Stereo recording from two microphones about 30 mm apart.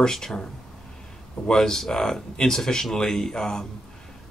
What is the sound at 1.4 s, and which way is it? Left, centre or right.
Speech, centre.